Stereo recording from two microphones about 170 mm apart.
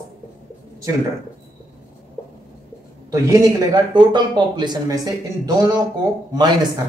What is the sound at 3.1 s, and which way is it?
Speech, 20° right (ahead or behind).